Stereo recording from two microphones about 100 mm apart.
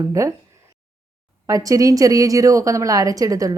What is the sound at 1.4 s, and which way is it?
Speech, 35° right (ahead or behind).